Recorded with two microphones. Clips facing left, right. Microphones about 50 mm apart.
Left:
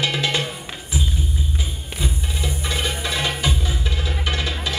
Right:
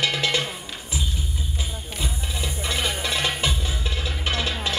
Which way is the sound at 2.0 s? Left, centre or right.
Left.